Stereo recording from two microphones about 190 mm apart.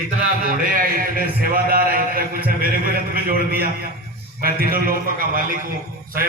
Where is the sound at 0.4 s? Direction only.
50° right (ahead or behind).